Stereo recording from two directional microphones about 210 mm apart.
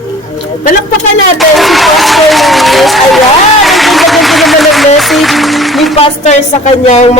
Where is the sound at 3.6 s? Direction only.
Centre (ahead or behind).